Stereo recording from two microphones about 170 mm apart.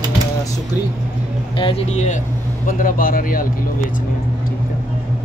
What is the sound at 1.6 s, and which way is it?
Speech, 40° left (ahead or behind).